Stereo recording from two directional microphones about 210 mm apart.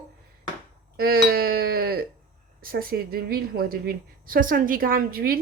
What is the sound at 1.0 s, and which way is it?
A woman's voice, 45° right (ahead or behind).